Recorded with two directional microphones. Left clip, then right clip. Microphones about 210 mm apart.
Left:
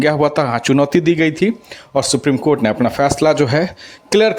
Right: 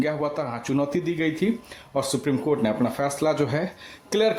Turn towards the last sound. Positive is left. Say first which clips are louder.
# left 9 dB
turn(degrees=30)  # may be behind; listen again after turning